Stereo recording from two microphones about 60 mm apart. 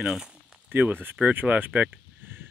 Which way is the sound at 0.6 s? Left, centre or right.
Right.